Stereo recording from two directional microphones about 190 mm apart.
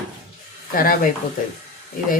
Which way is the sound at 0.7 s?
45° left (ahead or behind).